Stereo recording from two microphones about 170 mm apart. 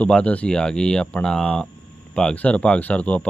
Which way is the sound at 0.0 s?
5° left (ahead or behind).